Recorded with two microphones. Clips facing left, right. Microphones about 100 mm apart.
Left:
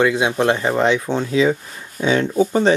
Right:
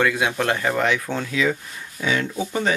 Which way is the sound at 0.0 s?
20° left (ahead or behind).